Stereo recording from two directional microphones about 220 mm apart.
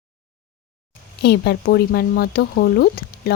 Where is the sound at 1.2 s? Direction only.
45° left (ahead or behind).